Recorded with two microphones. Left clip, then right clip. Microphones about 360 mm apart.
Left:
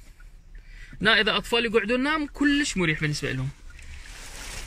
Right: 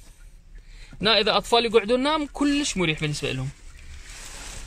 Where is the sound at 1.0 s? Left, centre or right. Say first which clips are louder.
Right 1 dB; centre.